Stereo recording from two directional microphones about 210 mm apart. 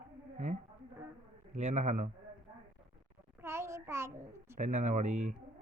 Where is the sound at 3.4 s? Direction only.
15° right (ahead or behind).